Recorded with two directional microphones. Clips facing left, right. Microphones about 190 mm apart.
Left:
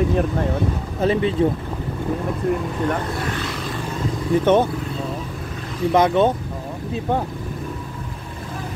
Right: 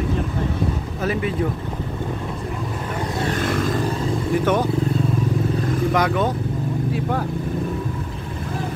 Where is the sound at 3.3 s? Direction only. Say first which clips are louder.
Right 6 dB; 50° right (ahead or behind).